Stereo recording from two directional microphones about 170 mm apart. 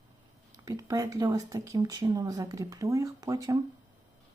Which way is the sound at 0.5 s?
20° right (ahead or behind).